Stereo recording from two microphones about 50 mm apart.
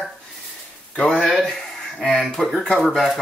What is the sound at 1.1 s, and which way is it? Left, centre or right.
Speech, centre.